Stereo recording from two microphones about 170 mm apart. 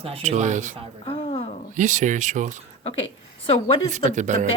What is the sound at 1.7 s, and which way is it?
Speech, 45° right (ahead or behind).